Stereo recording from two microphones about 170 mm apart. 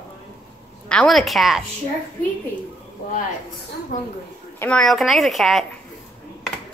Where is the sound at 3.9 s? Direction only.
50° left (ahead or behind).